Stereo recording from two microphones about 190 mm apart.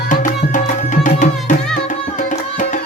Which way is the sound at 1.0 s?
45° left (ahead or behind).